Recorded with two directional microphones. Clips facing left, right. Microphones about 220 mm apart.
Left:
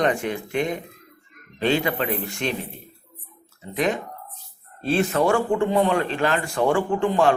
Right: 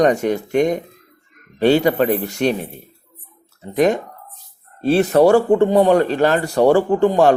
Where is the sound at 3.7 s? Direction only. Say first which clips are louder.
Right 8 dB; 45° right (ahead or behind).